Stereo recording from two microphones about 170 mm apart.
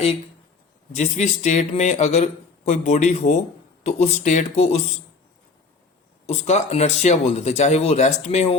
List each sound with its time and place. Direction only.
0.9 s speech: 40° left (ahead or behind)
6.2 s speech: 40° left (ahead or behind)